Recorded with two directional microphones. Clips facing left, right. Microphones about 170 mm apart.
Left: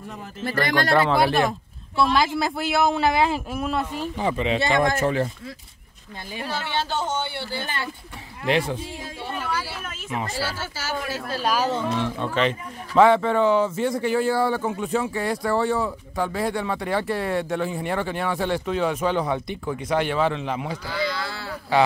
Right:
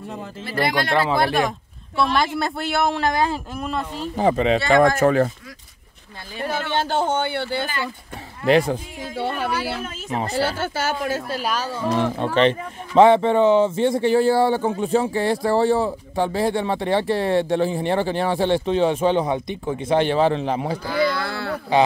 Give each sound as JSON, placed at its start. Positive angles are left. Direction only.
{"t": 0.6, "sound": "speech", "side_deg": -10}
{"t": 2.0, "sound": "speech", "side_deg": 0}
{"t": 4.2, "sound": "a man's voice", "side_deg": -40}
{"t": 6.4, "sound": "a man's voice", "side_deg": -50}
{"t": 8.5, "sound": "speech", "side_deg": -40}
{"t": 9.1, "sound": "speech", "side_deg": -70}
{"t": 10.0, "sound": "speech", "side_deg": -35}
{"t": 10.3, "sound": "speech", "side_deg": -55}
{"t": 11.9, "sound": "a man's voice", "side_deg": -40}
{"t": 12.4, "sound": "speech", "side_deg": -25}
{"t": 20.8, "sound": "speech", "side_deg": -55}